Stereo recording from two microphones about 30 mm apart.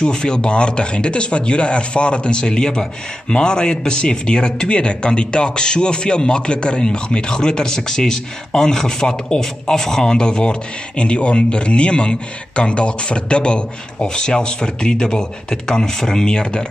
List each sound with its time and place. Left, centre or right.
0.0 s speech: left